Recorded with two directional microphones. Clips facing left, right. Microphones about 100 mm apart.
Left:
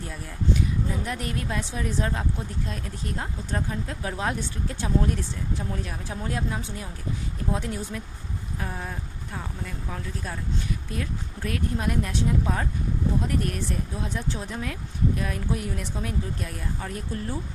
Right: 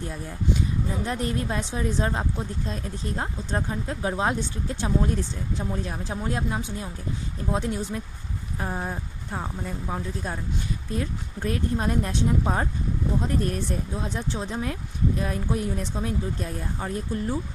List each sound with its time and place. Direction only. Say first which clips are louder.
1.0 s speech: right 3 dB; 25° right (ahead or behind)
8.5 s speech: right 4 dB; 30° right (ahead or behind)